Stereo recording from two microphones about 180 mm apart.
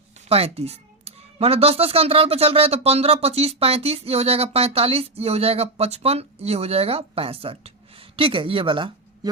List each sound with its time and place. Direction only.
0.3 s speech: 35° right (ahead or behind)